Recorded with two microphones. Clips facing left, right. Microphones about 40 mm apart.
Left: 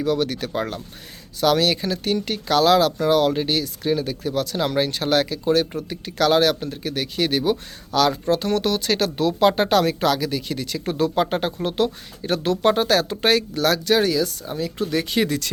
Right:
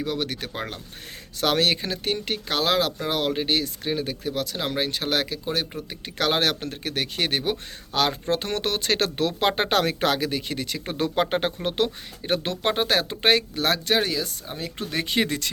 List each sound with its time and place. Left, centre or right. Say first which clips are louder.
0.0 s speech: left 6 dB; right
1.4 s speech: left 3 dB; right; by 5.6 s centre
5.9 s speech: left 6 dB; right
9.5 s speech: left 4 dB; right